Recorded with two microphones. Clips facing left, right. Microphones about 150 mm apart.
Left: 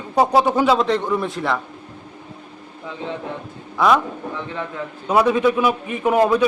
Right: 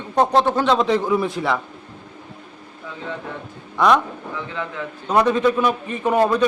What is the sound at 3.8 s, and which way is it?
Speech, 5° left (ahead or behind).